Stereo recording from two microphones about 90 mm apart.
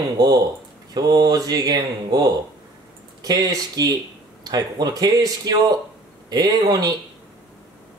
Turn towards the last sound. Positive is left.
turn(degrees=-45)  # may be behind; listen again after turning